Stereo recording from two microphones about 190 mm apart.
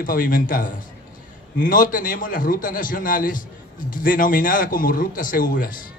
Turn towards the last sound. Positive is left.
turn(degrees=45)  # may be behind; listen again after turning